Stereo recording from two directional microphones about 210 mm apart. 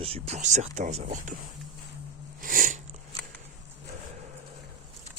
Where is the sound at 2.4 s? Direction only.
40° right (ahead or behind).